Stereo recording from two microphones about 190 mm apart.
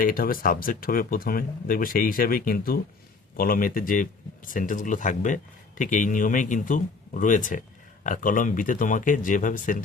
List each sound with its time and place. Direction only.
0.0 s speech: 50° left (ahead or behind)